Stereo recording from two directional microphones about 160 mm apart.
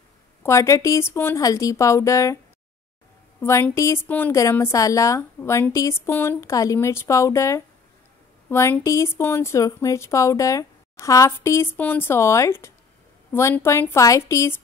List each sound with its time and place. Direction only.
0.4 s a woman's voice: 20° left (ahead or behind)
3.3 s a woman's voice: 15° left (ahead or behind)